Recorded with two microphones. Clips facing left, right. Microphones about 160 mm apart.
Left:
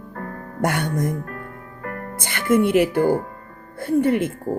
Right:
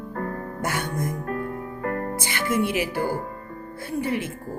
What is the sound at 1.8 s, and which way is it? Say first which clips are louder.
Music: right 4 dB; 30° right (ahead or behind).